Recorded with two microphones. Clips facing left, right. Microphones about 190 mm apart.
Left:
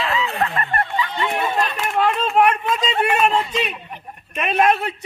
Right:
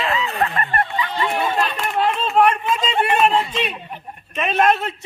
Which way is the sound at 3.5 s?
5° left (ahead or behind).